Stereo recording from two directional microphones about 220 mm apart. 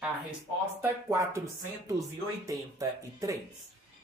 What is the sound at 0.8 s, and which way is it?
Speech, 15° right (ahead or behind).